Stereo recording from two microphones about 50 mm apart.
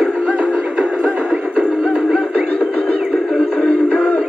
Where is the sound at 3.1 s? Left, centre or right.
Centre.